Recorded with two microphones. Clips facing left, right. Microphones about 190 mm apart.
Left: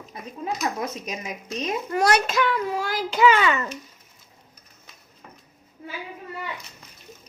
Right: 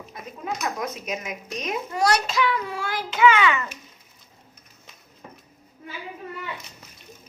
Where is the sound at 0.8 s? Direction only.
30° left (ahead or behind).